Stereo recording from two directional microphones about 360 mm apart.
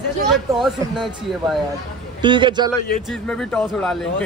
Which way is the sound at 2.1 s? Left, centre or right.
Centre.